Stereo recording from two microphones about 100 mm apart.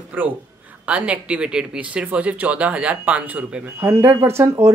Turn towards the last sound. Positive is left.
turn(degrees=-25)  # may be behind; listen again after turning